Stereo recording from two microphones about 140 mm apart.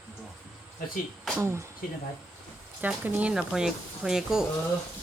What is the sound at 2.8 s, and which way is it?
Speech, 10° right (ahead or behind).